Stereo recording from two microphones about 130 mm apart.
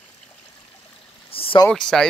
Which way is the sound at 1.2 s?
45° left (ahead or behind).